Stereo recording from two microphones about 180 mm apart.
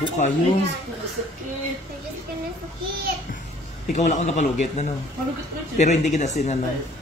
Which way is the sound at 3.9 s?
40° left (ahead or behind).